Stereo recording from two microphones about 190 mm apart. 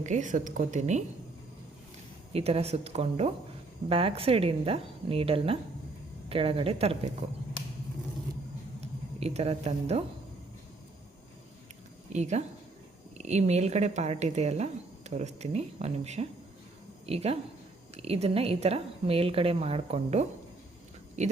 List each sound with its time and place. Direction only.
0.0 s speech: 40° right (ahead or behind)
2.3 s a woman's voice: 30° right (ahead or behind)
8.8 s speech: 35° right (ahead or behind)
12.1 s speech: 35° right (ahead or behind)